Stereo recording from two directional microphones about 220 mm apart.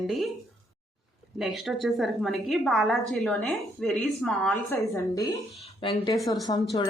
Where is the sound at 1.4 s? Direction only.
Centre (ahead or behind).